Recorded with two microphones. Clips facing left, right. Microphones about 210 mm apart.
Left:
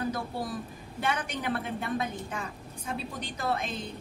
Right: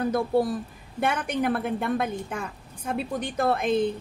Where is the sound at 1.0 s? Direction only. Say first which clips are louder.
Right 6 dB; 50° right (ahead or behind).